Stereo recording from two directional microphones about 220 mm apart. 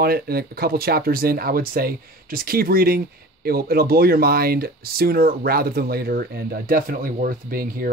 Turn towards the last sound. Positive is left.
turn(degrees=-40)  # may be behind; listen again after turning